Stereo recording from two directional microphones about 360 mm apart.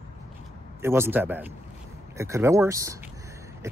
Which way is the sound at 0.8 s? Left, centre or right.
Centre.